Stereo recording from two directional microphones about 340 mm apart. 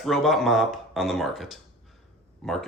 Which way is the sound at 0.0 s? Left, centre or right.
Centre.